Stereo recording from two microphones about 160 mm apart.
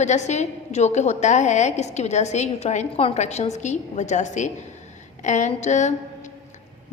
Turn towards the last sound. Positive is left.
turn(degrees=50)  # may be behind; listen again after turning